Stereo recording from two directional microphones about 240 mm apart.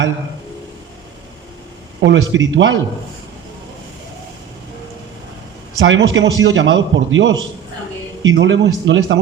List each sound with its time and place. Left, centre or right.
2.0 s a man's voice: right
5.8 s a man's voice: right